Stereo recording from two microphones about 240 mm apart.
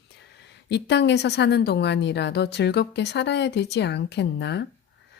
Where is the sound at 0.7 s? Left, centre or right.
Left.